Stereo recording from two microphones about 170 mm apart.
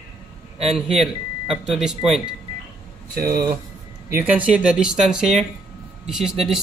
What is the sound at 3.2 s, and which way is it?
Speech, 60° right (ahead or behind).